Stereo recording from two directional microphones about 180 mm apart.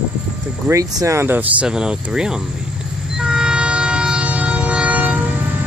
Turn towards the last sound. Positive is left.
turn(degrees=-10)  # may be behind; listen again after turning